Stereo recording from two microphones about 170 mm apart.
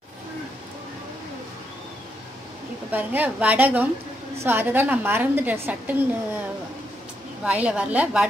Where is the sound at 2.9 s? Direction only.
10° right (ahead or behind).